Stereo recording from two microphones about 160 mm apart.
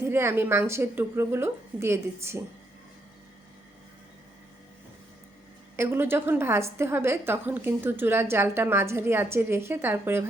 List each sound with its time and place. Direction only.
0.0 s a woman's voice: 15° right (ahead or behind)
5.7 s a woman's voice: 15° right (ahead or behind)